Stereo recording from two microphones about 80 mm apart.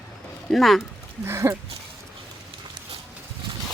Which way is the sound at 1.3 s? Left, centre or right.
Right.